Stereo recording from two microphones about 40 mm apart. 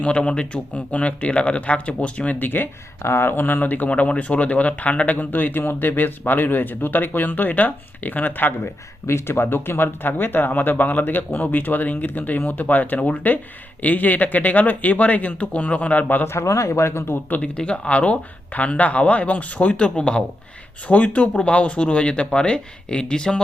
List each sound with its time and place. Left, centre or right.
0.0 s speech: left
2.5 s speech: left
3.6 s speech: left
8.6 s speech: left
10.4 s speech: left
17.6 s speech: left
20.8 s speech: left